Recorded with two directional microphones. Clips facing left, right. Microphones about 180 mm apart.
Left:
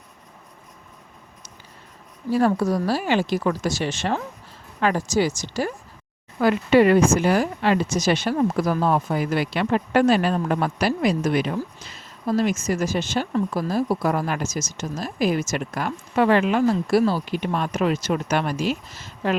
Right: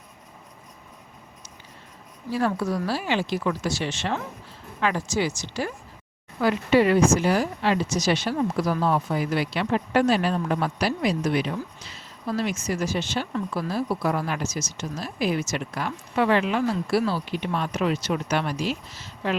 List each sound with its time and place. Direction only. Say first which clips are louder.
2.3 s speech: left 5 dB; 40° left (ahead or behind)
6.4 s speech: left 3 dB; 55° left (ahead or behind)